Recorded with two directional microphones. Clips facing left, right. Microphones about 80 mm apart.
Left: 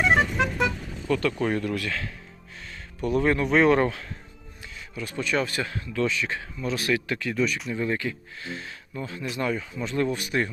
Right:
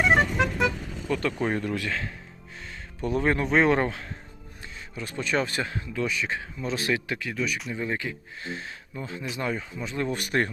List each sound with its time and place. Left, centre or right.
0.0 s music: centre
1.0 s speech: centre
10.1 s speech: right